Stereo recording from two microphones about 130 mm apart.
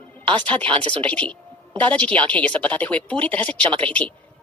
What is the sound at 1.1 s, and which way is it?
A woman's voice, 10° left (ahead or behind).